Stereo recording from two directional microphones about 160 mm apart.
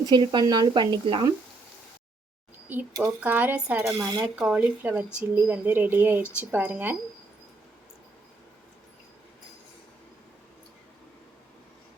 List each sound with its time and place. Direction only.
0.0 s speech: 30° right (ahead or behind)
2.6 s speech: 15° right (ahead or behind)